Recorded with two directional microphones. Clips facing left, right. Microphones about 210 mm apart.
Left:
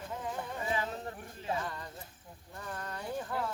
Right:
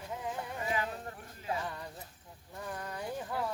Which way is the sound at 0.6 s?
30° left (ahead or behind).